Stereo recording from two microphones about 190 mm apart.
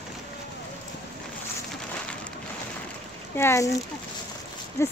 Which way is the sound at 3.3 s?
15° left (ahead or behind).